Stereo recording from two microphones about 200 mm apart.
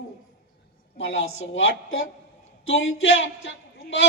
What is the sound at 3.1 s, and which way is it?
Speech, 65° left (ahead or behind).